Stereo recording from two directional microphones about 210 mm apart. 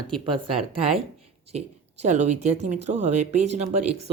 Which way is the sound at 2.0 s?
35° right (ahead or behind).